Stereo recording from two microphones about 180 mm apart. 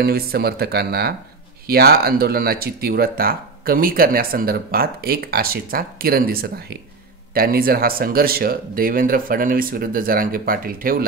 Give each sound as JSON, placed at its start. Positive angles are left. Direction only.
{"t": 0.0, "sound": "speech", "side_deg": -60}